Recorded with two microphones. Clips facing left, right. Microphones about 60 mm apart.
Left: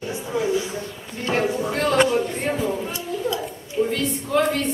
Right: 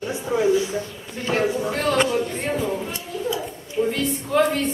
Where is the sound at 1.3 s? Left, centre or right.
Centre.